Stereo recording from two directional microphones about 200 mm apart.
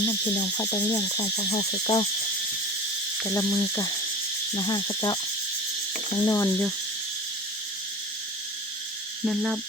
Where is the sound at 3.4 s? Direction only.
10° left (ahead or behind).